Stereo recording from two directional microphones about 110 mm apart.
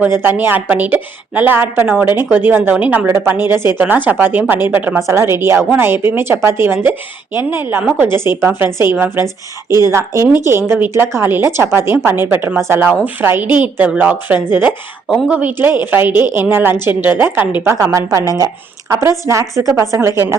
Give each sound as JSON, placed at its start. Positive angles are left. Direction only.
{"t": 0.2, "sound": "a woman's voice", "side_deg": -20}